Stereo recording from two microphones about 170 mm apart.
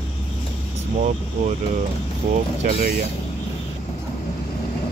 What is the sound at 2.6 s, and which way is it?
Speech, 55° right (ahead or behind).